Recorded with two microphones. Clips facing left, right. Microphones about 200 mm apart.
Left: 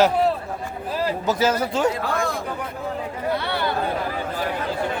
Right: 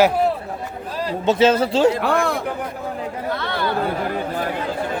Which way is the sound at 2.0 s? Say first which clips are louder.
Right 5 dB; 65° right (ahead or behind).